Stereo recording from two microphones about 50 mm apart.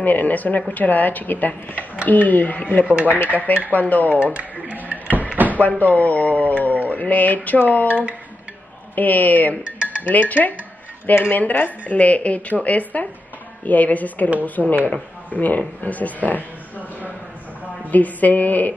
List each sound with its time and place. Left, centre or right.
0.0 s speech: left
2.9 s speech: right
3.4 s speech: left
4.1 s a sound: right
5.5 s speech: left
8.9 s speech: left
14.6 s speech: left
15.3 s speech: left
17.9 s speech: left